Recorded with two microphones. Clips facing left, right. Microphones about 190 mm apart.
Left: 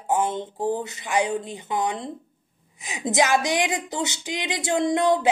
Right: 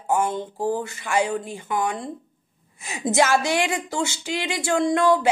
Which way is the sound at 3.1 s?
15° left (ahead or behind).